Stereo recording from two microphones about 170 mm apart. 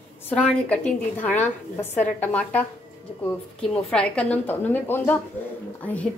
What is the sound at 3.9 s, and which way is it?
A woman's voice, 5° left (ahead or behind).